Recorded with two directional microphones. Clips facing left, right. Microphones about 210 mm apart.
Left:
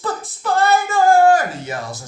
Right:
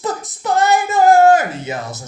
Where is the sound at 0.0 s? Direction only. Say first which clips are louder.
Right 2 dB; 20° right (ahead or behind).